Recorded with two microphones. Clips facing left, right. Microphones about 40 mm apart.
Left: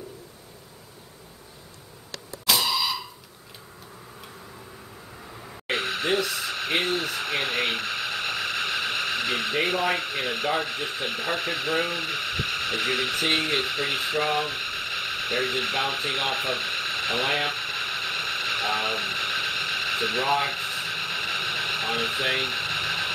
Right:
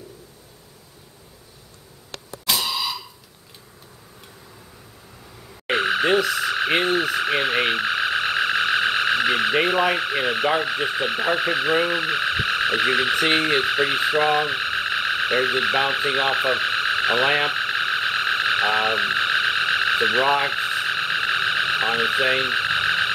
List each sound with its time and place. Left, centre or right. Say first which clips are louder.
5.7 s frog: right 6 dB; right
9.8 s speech: right 5 dB; right
13.4 s frog: right 6 dB; right